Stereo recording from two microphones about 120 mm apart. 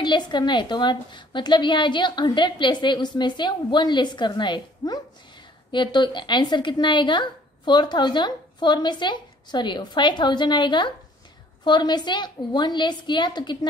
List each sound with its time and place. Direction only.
0.0 s a woman's voice: 40° left (ahead or behind)